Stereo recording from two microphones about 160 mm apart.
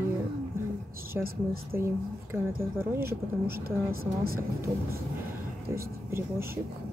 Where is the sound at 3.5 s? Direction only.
65° right (ahead or behind).